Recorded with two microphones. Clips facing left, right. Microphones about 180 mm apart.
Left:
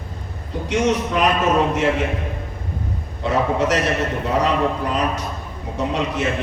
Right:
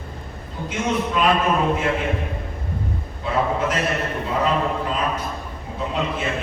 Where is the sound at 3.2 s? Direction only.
80° left.